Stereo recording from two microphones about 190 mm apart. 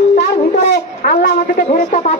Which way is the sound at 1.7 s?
40° left (ahead or behind).